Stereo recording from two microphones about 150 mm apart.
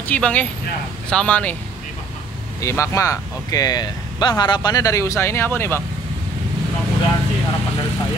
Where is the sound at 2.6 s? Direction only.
20° left (ahead or behind).